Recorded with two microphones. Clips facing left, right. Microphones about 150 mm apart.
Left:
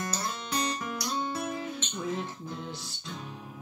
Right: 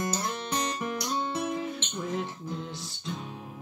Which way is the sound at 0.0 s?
20° right (ahead or behind).